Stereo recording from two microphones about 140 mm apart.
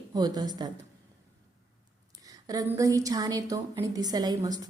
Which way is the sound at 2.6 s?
25° right (ahead or behind).